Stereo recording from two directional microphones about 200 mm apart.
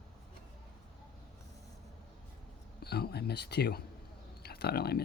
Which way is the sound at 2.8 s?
55° left (ahead or behind).